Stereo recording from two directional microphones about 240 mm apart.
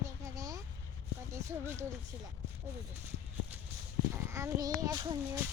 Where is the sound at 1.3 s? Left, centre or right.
Centre.